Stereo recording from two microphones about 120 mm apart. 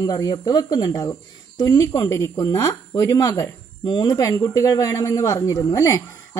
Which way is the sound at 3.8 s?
40° left (ahead or behind).